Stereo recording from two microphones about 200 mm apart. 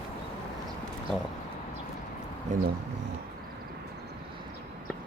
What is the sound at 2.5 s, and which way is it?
Speech, 35° right (ahead or behind).